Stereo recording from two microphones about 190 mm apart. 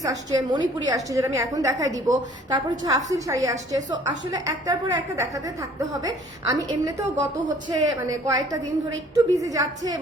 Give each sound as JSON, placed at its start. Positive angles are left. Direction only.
{"t": 0.0, "sound": "a woman's voice", "side_deg": -20}